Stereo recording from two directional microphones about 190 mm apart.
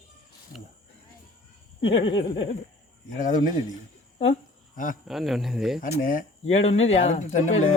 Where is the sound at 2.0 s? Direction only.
25° left (ahead or behind).